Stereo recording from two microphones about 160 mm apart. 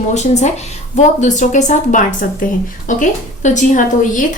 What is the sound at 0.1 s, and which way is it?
Speech, 45° left (ahead or behind).